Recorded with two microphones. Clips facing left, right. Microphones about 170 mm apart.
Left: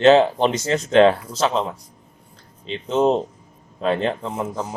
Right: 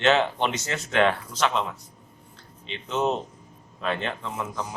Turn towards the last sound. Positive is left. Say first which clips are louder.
# left 6 dB
turn(degrees=35)  # may be behind; listen again after turning